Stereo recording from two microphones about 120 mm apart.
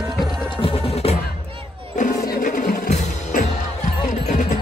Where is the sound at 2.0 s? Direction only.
90° left.